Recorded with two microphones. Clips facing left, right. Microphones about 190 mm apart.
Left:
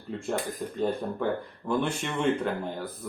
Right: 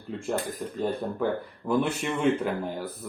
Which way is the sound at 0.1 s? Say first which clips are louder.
Right 1 dB; centre (ahead or behind).